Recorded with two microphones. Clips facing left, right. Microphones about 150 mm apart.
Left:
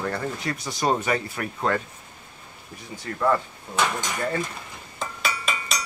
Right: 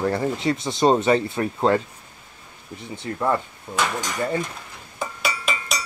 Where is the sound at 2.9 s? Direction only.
20° right (ahead or behind).